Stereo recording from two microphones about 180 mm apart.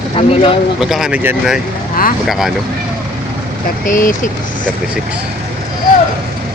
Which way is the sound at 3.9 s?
50° left (ahead or behind).